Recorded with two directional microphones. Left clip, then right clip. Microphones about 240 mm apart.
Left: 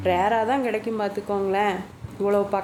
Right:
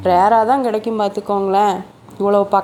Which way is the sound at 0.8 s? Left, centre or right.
Right.